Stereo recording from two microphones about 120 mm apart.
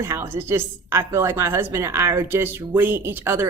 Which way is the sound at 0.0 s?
20° right (ahead or behind).